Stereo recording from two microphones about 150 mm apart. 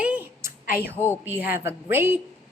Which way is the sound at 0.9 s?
15° left (ahead or behind).